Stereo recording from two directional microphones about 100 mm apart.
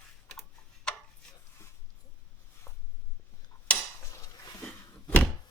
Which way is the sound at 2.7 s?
25° left (ahead or behind).